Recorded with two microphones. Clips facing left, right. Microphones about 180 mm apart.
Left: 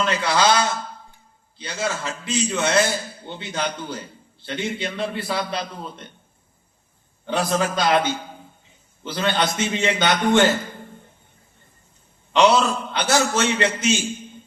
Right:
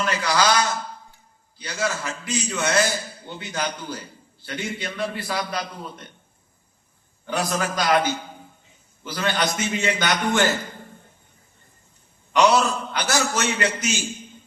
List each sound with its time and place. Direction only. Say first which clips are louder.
0.0 s a sound: left 2 dB; 25° left (ahead or behind)
1.5 s a man's voice: even; 25° left (ahead or behind)
7.3 s a man's voice: left 3 dB; 25° left (ahead or behind)
12.3 s a man's voice: left 1 dB; 25° left (ahead or behind)